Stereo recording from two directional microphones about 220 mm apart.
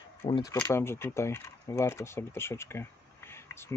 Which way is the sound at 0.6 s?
10° left (ahead or behind).